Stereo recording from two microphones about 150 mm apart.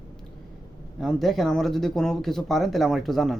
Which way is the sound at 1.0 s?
Centre (ahead or behind).